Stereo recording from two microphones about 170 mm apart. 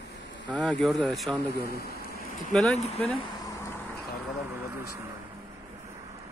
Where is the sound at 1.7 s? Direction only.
65° left (ahead or behind).